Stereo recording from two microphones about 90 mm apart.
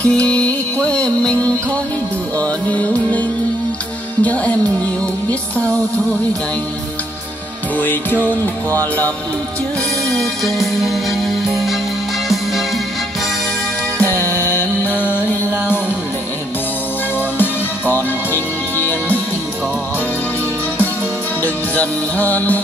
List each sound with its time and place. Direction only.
0.0 s music: 15° left (ahead or behind)
7.8 s music: 20° left (ahead or behind)
10.1 s music: centre (ahead or behind)
13.9 s music: 20° left (ahead or behind)
17.4 s music: 20° left (ahead or behind)
21.4 s music: 15° left (ahead or behind)